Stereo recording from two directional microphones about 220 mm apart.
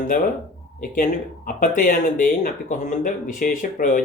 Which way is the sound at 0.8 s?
35° left (ahead or behind).